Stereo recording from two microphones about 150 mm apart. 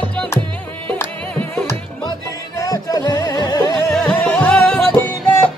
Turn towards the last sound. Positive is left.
turn(degrees=10)  # may be behind; listen again after turning